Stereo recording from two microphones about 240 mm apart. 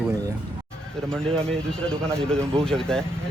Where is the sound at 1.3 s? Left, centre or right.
Centre.